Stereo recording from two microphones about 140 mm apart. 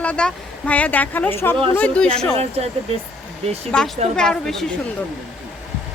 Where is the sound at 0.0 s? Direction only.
10° left (ahead or behind).